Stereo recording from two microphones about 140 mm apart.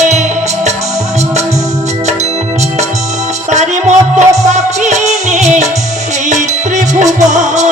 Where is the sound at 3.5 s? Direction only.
60° right (ahead or behind).